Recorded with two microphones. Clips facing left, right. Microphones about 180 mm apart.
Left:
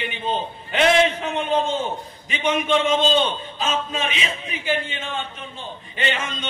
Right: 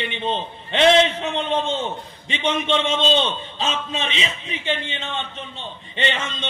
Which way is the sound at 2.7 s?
25° right (ahead or behind).